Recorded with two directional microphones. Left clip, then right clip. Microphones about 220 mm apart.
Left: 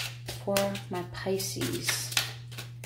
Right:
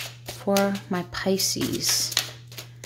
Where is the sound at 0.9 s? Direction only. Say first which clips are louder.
Right 6 dB; 45° right (ahead or behind).